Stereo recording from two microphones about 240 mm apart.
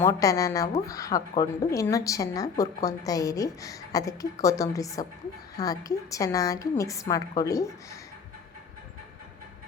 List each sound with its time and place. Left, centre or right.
0.0 s a woman's voice: centre